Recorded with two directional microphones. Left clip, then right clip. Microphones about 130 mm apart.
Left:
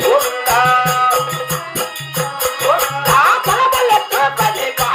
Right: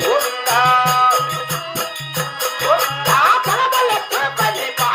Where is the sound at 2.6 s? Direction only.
25° right (ahead or behind).